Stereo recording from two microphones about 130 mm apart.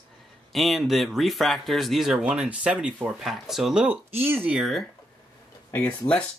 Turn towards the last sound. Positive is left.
turn(degrees=10)  # may be behind; listen again after turning